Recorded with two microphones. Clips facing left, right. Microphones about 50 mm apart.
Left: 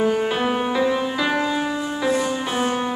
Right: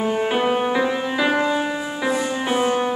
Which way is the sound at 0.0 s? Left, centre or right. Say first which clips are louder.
Even; centre.